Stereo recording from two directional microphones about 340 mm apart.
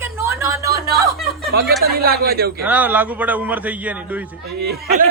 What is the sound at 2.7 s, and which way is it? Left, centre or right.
Speech, centre.